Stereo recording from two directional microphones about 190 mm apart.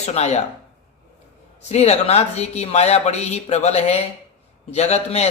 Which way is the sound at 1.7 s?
35° left (ahead or behind).